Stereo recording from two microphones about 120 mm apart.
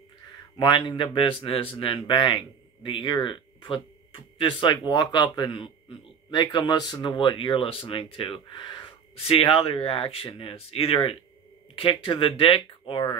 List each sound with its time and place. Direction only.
0.6 s speech: 40° left (ahead or behind)